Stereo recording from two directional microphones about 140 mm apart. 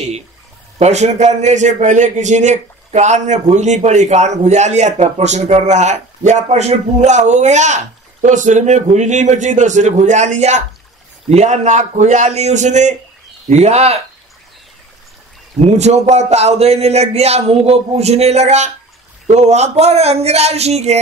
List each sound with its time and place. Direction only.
0.7 s a man's voice: 55° right (ahead or behind)
15.6 s speech: 55° right (ahead or behind)